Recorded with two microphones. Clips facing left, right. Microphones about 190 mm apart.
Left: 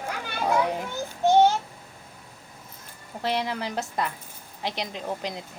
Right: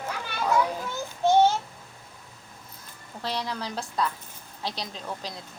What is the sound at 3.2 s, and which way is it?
Speech, 55° left (ahead or behind).